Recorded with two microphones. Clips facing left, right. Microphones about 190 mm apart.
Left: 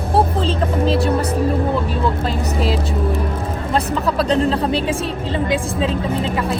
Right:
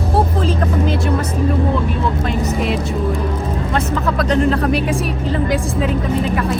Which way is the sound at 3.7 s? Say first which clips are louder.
Left 1 dB; 30° left (ahead or behind).